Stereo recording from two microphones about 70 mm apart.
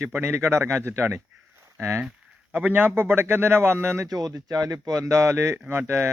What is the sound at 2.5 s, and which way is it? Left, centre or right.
A man's voice, right.